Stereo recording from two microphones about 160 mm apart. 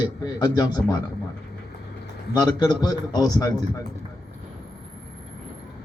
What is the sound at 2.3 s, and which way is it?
A man's voice, 25° left (ahead or behind).